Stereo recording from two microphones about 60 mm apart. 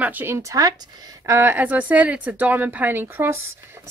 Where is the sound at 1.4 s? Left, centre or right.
Right.